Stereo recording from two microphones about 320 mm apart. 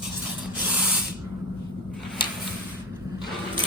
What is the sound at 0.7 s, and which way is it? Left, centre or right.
Spray, centre.